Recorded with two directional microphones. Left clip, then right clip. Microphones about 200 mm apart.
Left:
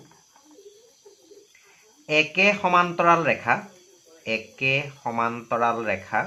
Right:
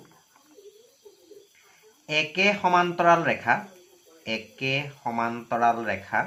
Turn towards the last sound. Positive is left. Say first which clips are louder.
# left 1 dB
turn(degrees=25)  # may be behind; listen again after turning